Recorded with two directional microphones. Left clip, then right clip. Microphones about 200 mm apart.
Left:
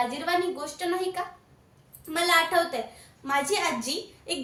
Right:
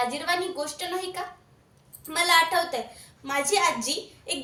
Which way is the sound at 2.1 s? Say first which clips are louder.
Right 1 dB; 15° left (ahead or behind).